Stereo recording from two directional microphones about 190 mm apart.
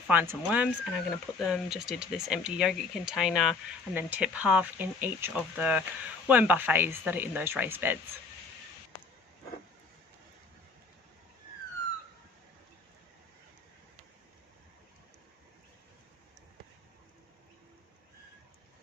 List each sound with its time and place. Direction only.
0.1 s speech: 10° right (ahead or behind)